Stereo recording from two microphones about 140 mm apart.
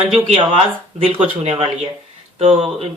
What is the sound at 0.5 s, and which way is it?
Speech, 45° right (ahead or behind).